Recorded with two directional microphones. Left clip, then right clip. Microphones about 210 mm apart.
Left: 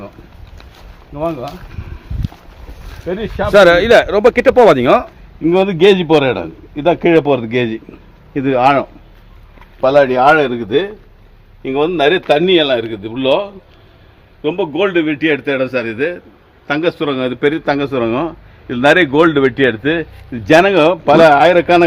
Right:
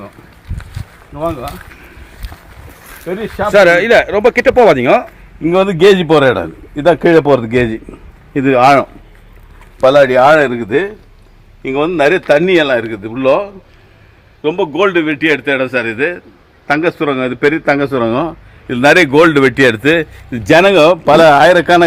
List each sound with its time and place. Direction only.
1.1 s speech: centre (ahead or behind)
3.0 s speech: centre (ahead or behind)
5.4 s a man's voice: 35° right (ahead or behind)
11.9 s a man's voice: 10° right (ahead or behind)
16.6 s a man's voice: 20° right (ahead or behind)
17.7 s a man's voice: 35° right (ahead or behind)